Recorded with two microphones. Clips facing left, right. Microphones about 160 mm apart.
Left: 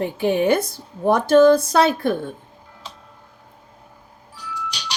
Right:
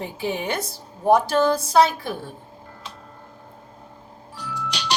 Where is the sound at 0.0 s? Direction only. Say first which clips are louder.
Left 8 dB; 55° left (ahead or behind).